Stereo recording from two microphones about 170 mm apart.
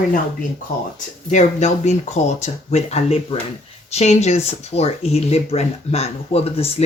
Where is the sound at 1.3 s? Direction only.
45° left (ahead or behind).